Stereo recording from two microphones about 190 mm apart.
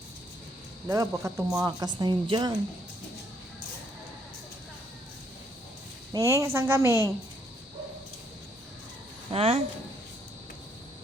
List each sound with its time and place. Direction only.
0.9 s speech: 15° right (ahead or behind)
6.1 s a woman's voice: 15° right (ahead or behind)
9.3 s speech: 30° right (ahead or behind)